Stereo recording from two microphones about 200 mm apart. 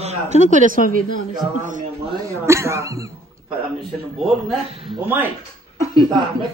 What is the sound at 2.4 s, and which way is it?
Speech, 15° right (ahead or behind).